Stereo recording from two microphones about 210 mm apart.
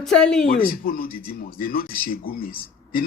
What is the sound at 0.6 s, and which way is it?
A man's voice, 45° left (ahead or behind).